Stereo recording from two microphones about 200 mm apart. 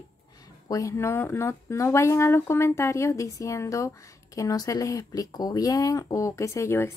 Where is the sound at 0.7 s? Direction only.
15° left (ahead or behind).